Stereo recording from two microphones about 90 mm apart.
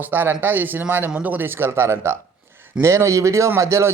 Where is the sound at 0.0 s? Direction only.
20° right (ahead or behind).